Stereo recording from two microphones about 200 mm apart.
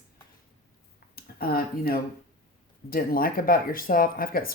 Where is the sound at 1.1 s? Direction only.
50° left (ahead or behind).